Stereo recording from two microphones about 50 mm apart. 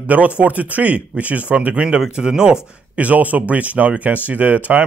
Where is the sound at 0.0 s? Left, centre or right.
Right; by 2.6 s centre.